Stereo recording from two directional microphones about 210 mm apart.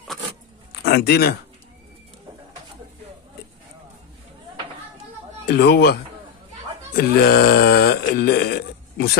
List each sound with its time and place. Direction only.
0.8 s a man's voice: 50° left (ahead or behind)
5.5 s speech: 50° left (ahead or behind)
7.0 s a sound: 45° left (ahead or behind)